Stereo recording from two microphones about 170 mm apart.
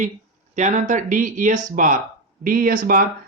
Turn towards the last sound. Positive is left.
turn(degrees=-55)  # may be behind; listen again after turning